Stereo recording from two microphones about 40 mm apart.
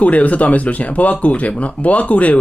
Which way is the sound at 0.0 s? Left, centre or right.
Left.